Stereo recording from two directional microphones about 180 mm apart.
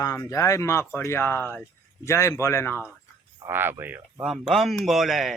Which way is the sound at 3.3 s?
15° right (ahead or behind).